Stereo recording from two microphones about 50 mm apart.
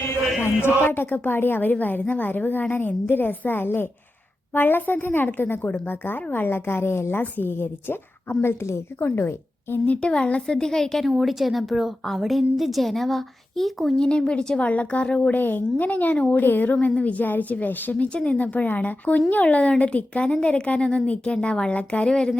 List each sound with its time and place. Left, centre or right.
0.4 s a woman's voice: left
7.2 s speech: left
8.4 s a woman's voice: left
9.0 s a woman's voice: left
9.8 s speech: left
10.4 s a woman's voice: centre
11.0 s a woman's voice: centre
14.0 s speech: left
14.7 s a woman's voice: left
17.9 s a woman's voice: left